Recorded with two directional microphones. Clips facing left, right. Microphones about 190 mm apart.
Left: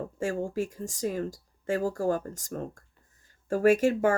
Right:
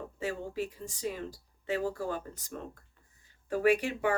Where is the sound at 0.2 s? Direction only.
45° left (ahead or behind).